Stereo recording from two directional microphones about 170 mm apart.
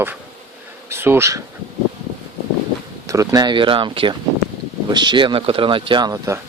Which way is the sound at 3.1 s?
20° right (ahead or behind).